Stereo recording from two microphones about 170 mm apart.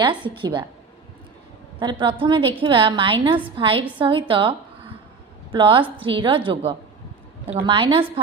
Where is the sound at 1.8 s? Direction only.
25° right (ahead or behind).